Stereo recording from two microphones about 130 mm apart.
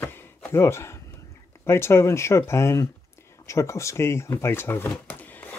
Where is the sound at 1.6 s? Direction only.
20° left (ahead or behind).